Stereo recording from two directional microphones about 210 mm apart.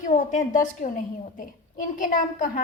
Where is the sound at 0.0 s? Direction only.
35° left (ahead or behind).